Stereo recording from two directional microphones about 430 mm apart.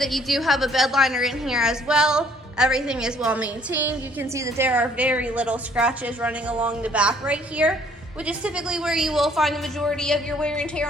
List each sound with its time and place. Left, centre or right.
0.0 s a woman's voice: centre